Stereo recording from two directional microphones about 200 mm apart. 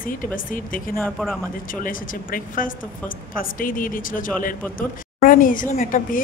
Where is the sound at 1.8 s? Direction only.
45° left (ahead or behind).